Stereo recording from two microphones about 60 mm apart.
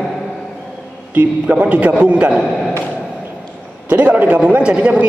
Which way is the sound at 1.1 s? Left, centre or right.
Right.